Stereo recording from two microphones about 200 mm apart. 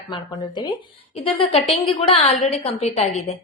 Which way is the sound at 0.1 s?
20° left (ahead or behind).